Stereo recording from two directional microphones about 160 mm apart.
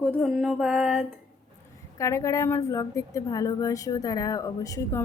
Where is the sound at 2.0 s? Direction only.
20° left (ahead or behind).